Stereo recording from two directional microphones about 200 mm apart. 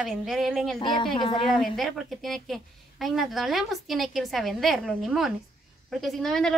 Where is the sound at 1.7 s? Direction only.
Centre (ahead or behind).